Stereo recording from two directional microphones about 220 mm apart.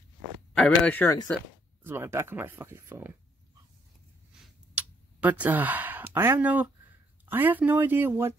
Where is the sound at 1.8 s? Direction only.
10° right (ahead or behind).